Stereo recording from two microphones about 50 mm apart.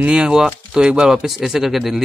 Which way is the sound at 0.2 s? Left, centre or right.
Centre.